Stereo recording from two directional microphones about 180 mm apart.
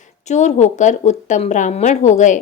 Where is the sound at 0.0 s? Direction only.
40° left (ahead or behind).